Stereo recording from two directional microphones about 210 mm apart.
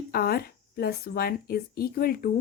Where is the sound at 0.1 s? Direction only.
45° left (ahead or behind).